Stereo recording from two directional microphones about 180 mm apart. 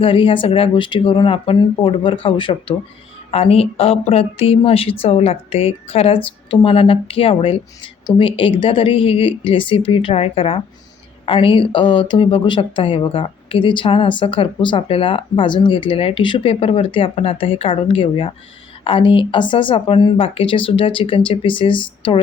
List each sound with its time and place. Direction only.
0.0 s speech: 30° left (ahead or behind)